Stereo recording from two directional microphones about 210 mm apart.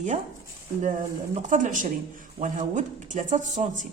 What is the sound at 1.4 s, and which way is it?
Speech, 35° right (ahead or behind).